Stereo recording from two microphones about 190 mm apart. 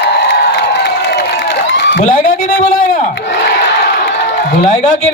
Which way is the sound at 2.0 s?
45° left (ahead or behind).